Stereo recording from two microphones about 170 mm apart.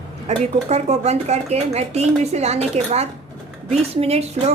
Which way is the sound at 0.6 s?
40° right (ahead or behind).